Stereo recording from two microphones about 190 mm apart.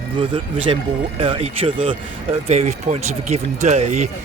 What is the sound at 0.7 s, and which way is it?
Speech, 30° right (ahead or behind).